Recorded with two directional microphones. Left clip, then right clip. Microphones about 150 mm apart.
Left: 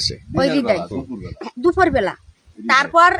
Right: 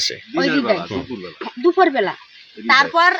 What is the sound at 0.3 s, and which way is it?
Speech, 45° left (ahead or behind).